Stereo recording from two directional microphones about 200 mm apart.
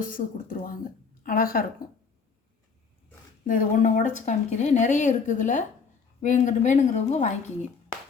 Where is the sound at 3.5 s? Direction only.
40° left (ahead or behind).